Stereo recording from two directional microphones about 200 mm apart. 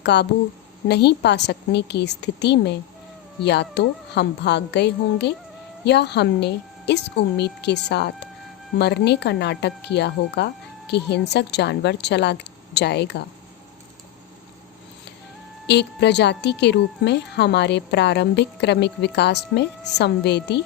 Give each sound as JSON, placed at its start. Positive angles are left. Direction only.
{"t": 0.0, "sound": "a woman's voice", "side_deg": 55}
{"t": 15.6, "sound": "a woman's voice", "side_deg": 60}